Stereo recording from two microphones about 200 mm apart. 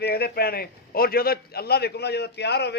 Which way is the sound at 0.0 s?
50° left (ahead or behind).